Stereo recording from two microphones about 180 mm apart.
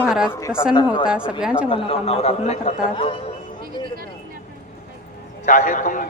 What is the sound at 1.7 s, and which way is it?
Speech, 30° left (ahead or behind).